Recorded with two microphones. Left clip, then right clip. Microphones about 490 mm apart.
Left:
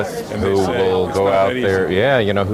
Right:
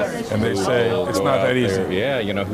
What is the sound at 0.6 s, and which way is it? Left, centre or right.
Speech, right.